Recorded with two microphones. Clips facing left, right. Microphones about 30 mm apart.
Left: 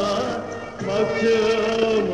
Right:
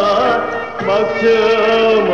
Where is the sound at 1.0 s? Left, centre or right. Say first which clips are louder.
Right 5 dB; right.